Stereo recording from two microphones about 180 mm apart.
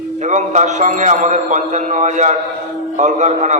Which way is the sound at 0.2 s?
40° right (ahead or behind).